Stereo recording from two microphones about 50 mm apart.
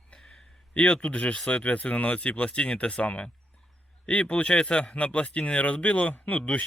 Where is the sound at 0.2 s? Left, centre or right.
Centre.